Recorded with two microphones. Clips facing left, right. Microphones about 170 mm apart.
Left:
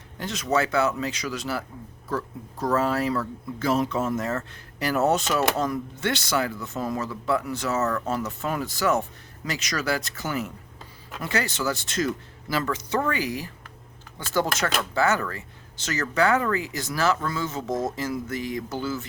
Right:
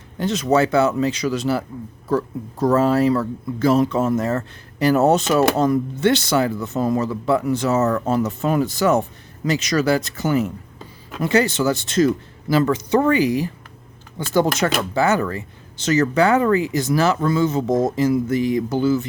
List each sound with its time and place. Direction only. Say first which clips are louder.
0.2 s speech: right 7 dB; 25° right (ahead or behind)